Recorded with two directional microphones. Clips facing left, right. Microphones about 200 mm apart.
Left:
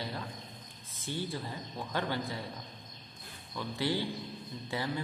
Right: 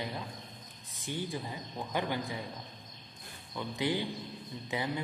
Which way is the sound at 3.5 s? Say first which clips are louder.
Even; 15° right (ahead or behind).